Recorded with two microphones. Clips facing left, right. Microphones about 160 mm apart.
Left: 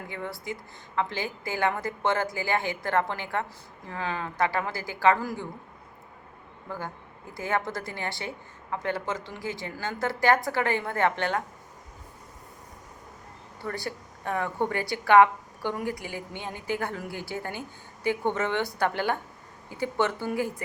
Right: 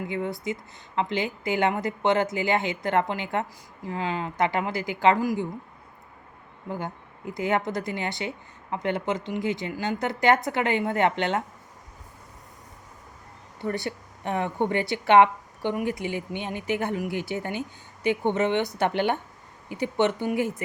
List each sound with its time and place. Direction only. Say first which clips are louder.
0.1 s speech: right 3 dB; 20° right (ahead or behind)
6.7 s speech: right 4 dB; 20° right (ahead or behind)
13.6 s speech: right 4 dB; 20° right (ahead or behind)